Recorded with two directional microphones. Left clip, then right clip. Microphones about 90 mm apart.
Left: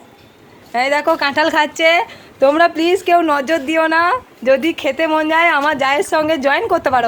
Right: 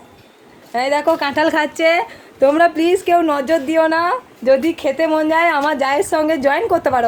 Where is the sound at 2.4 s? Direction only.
40° right (ahead or behind).